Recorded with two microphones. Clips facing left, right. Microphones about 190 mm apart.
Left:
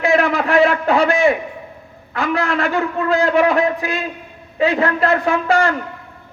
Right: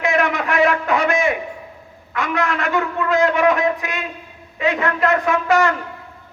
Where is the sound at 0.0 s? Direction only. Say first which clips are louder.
Left 3 dB; 35° left (ahead or behind).